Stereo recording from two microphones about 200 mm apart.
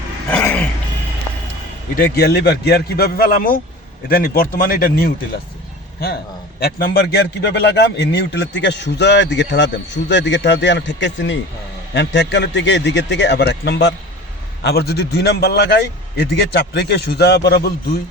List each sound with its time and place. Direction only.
0.3 s a sound: 10° left (ahead or behind)
2.0 s a man's voice: 50° left (ahead or behind)
6.6 s a man's voice: 50° left (ahead or behind)